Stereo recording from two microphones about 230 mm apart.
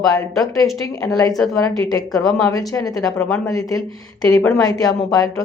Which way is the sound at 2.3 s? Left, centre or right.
Centre.